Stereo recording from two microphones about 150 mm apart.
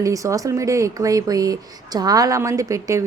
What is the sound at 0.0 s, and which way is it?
Speech, 20° right (ahead or behind).